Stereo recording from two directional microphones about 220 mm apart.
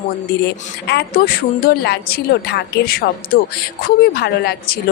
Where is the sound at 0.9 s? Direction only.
45° left (ahead or behind).